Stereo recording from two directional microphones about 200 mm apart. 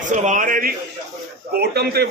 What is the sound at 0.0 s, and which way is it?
Speech, 40° right (ahead or behind).